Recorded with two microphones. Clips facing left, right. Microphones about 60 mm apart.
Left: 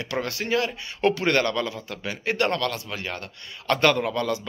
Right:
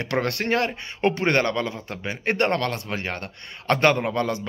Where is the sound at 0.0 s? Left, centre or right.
Right.